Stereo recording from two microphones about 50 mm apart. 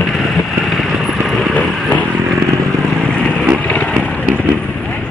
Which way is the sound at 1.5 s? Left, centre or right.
Left.